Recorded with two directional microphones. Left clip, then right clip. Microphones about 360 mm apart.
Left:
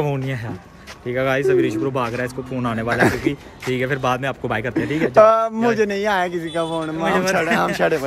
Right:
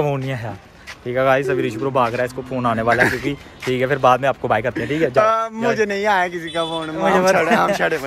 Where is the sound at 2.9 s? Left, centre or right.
Centre.